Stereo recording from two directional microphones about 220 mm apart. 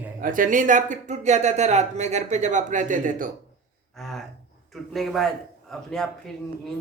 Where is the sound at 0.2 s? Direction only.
40° right (ahead or behind).